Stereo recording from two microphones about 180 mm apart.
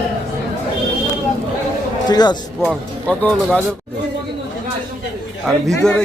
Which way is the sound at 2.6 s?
5° left (ahead or behind).